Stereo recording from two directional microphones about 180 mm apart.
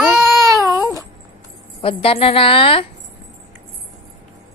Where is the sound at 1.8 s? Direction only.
30° left (ahead or behind).